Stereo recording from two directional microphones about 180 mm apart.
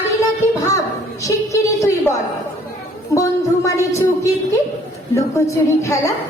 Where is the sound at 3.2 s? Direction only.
15° left (ahead or behind).